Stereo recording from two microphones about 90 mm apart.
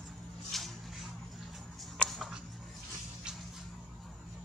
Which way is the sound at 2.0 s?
Centre (ahead or behind).